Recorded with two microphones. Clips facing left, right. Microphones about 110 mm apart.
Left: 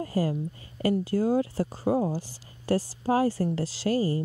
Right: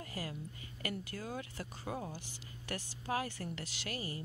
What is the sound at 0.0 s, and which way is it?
Speech, 35° left (ahead or behind).